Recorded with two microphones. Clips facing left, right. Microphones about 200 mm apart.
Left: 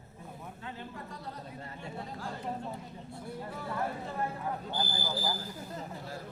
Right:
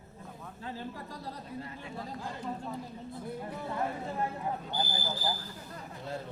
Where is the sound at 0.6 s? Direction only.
35° right (ahead or behind).